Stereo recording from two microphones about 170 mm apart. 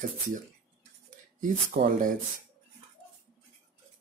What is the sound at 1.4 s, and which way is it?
Speech, 50° right (ahead or behind).